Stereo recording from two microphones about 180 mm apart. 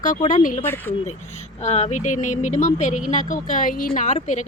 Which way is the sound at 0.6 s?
10° left (ahead or behind).